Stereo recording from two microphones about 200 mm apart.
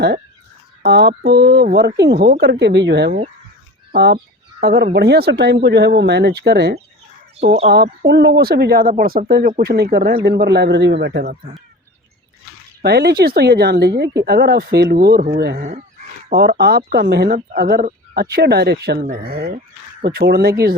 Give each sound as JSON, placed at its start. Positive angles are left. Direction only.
{"t": 0.8, "sound": "speech", "side_deg": -55}
{"t": 12.8, "sound": "speech", "side_deg": -55}
{"t": 19.5, "sound": "speech", "side_deg": -40}